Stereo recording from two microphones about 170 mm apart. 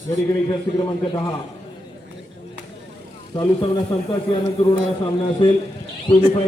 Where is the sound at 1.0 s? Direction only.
25° left (ahead or behind).